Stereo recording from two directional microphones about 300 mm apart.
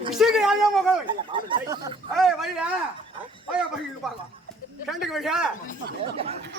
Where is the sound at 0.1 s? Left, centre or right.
Centre.